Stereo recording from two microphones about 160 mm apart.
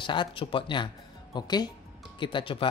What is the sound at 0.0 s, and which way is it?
A man's voice, 30° left (ahead or behind).